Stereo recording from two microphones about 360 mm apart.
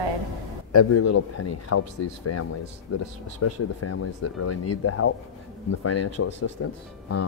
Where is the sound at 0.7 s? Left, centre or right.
Left.